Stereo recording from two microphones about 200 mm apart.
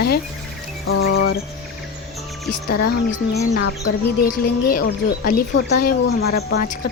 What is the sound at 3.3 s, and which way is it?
Speech, 55° left (ahead or behind).